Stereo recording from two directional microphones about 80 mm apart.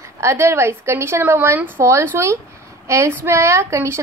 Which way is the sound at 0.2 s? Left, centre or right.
Right.